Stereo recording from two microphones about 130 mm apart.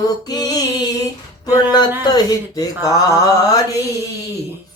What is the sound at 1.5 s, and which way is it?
Speech, 30° left (ahead or behind).